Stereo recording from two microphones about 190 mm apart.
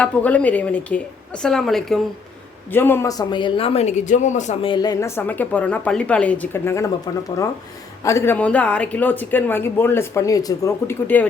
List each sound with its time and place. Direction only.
0.0 s speech: 5° left (ahead or behind); by 4.5 s 40° left (ahead or behind)
4.6 s speech: 25° left (ahead or behind)